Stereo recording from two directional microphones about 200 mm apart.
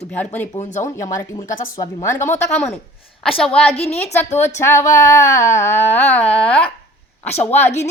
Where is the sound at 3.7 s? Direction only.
30° left (ahead or behind).